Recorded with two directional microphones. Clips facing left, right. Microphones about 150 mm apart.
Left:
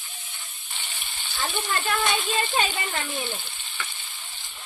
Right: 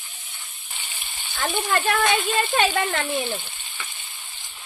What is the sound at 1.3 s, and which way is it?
Speech, 55° right (ahead or behind).